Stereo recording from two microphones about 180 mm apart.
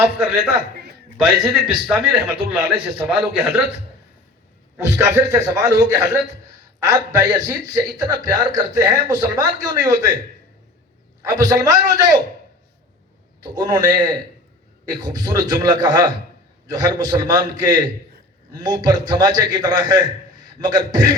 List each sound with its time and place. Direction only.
0.0 s a man's voice: 5° right (ahead or behind)
2.4 s speech: 65° right (ahead or behind)
2.7 s a man's voice: centre (ahead or behind)
4.9 s a man's voice: 15° right (ahead or behind)
11.2 s a man's voice: 20° right (ahead or behind)
13.4 s a man's voice: 20° right (ahead or behind)